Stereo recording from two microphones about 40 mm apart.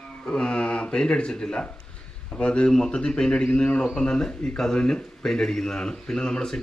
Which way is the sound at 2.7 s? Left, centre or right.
Centre.